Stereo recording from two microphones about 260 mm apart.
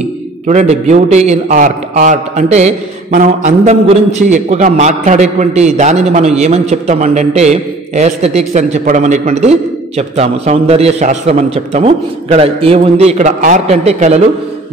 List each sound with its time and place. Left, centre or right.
0.5 s a man's voice: right